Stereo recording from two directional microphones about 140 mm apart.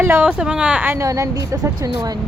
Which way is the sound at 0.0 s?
15° right (ahead or behind).